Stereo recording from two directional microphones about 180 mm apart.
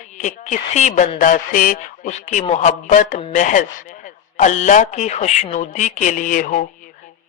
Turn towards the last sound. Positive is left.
turn(degrees=50)  # may be behind; listen again after turning